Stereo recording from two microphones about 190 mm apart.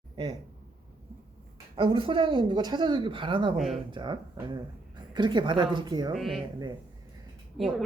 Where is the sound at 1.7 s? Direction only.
30° right (ahead or behind).